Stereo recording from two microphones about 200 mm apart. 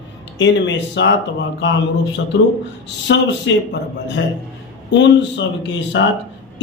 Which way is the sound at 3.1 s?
65° left (ahead or behind).